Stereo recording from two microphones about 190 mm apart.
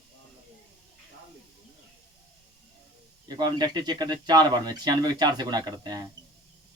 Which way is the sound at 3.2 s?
20° right (ahead or behind).